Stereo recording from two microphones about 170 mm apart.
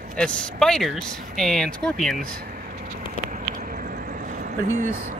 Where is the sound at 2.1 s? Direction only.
60° right (ahead or behind).